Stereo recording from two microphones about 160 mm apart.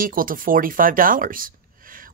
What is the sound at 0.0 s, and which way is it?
Speech, 60° right (ahead or behind).